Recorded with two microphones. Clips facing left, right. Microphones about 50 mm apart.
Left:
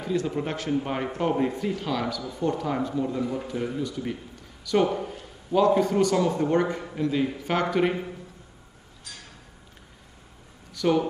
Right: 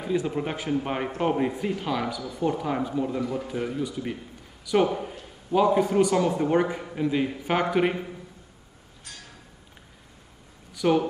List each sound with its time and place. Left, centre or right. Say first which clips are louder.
0.0 s a man's voice: even; centre
4.6 s a sound: even; centre
5.8 s a man's voice: right 1 dB; centre
7.9 s a man's voice: left 1 dB; centre
10.7 s speech: right 1 dB; centre